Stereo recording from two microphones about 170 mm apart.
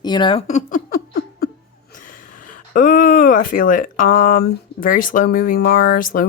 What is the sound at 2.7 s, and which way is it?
Speech, 50° left (ahead or behind).